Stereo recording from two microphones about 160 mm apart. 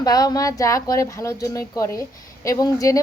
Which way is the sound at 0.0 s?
25° left (ahead or behind).